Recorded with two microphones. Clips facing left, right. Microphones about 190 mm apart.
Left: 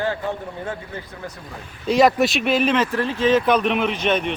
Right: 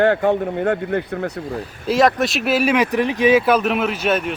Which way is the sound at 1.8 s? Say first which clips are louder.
Even; centre (ahead or behind).